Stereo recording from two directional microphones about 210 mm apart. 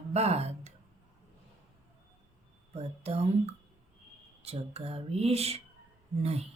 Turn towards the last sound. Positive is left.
turn(degrees=-30)  # may be behind; listen again after turning